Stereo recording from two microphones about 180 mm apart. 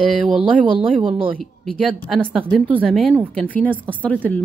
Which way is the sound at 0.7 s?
30° right (ahead or behind).